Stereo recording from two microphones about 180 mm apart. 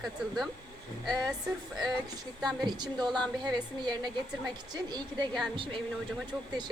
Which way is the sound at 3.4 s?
20° right (ahead or behind).